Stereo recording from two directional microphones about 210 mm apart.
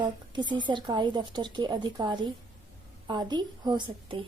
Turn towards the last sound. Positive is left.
turn(degrees=-20)  # may be behind; listen again after turning